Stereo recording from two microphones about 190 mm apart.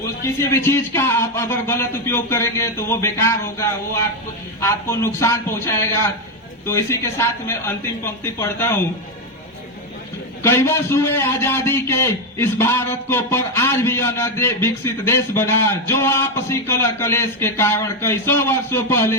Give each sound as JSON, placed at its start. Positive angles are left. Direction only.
{"t": 0.3, "sound": "a man's voice", "side_deg": 15}
{"t": 10.4, "sound": "a man's voice", "side_deg": 15}